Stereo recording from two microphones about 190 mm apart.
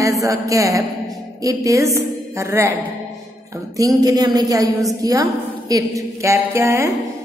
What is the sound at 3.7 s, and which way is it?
A woman's voice, 20° right (ahead or behind).